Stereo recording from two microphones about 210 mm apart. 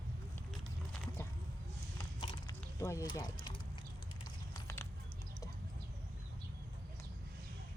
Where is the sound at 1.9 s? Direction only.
20° left (ahead or behind).